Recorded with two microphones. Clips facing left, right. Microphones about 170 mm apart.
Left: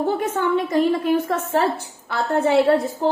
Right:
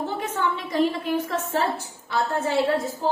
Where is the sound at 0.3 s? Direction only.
50° left (ahead or behind).